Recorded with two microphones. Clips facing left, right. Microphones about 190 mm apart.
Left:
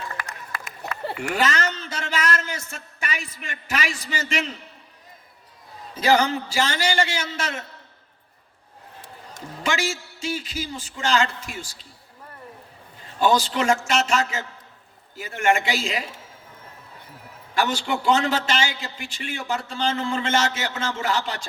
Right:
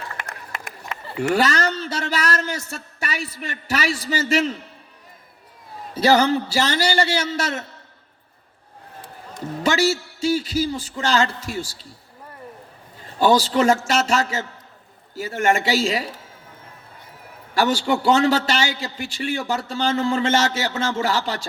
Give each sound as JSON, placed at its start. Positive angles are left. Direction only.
{"t": 0.5, "sound": "a sound", "side_deg": -25}
{"t": 1.3, "sound": "a man's voice", "side_deg": -35}
{"t": 6.0, "sound": "a man's voice", "side_deg": -35}
{"t": 9.6, "sound": "a man's voice", "side_deg": -35}
{"t": 13.1, "sound": "a man's voice", "side_deg": -35}
{"t": 17.5, "sound": "a man's voice", "side_deg": -40}